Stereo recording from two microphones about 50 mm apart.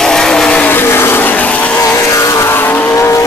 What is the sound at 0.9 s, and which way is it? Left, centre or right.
Vehicle, left.